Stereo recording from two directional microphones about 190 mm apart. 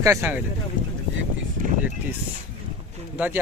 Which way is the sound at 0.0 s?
15° right (ahead or behind).